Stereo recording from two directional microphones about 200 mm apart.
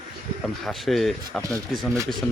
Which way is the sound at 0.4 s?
Centre (ahead or behind).